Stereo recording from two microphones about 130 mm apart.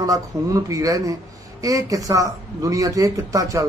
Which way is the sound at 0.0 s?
25° right (ahead or behind).